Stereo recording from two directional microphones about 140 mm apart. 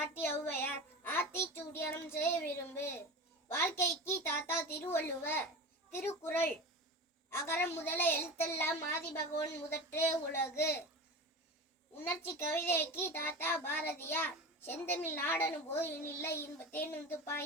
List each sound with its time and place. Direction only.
0.6 s a child's voice: 15° left (ahead or behind)
11.9 s a child's voice: 15° left (ahead or behind)